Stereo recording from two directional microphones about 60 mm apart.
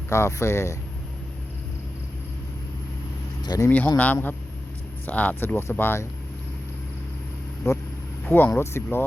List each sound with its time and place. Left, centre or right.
0.1 s speech: left
3.5 s speech: left
3.8 s speech: left
5.7 s speech: left
7.6 s speech: left
8.3 s speech: left